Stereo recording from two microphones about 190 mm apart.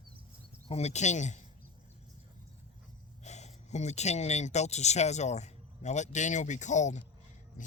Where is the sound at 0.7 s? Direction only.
35° left (ahead or behind).